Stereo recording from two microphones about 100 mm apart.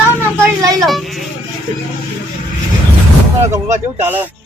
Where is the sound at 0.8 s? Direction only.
Centre (ahead or behind).